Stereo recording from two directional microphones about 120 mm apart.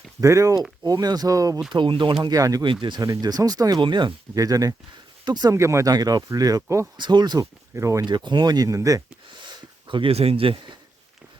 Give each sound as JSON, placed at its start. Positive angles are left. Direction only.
{"t": 0.2, "sound": "speech", "side_deg": -25}
{"t": 1.7, "sound": "speech", "side_deg": -40}
{"t": 2.2, "sound": "speech", "side_deg": -30}
{"t": 5.5, "sound": "speech", "side_deg": -25}
{"t": 6.9, "sound": "speech", "side_deg": -40}
{"t": 8.0, "sound": "speech", "side_deg": -40}
{"t": 9.8, "sound": "speech", "side_deg": -45}